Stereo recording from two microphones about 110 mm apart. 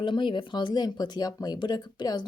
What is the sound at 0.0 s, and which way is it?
Speech, 50° left (ahead or behind).